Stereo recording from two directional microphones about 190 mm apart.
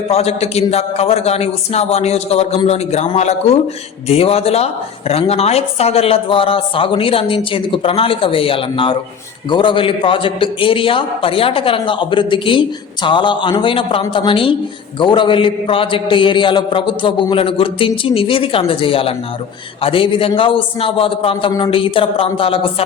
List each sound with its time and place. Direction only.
0.1 s a man's voice: 35° left (ahead or behind)